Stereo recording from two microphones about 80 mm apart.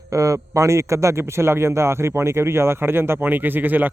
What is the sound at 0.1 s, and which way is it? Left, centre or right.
A man's voice, right.